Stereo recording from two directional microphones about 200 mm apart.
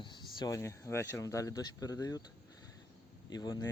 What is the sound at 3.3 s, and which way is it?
Speech, 20° left (ahead or behind).